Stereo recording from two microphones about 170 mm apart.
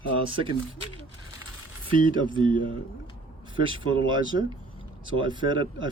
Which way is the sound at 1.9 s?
30° right (ahead or behind).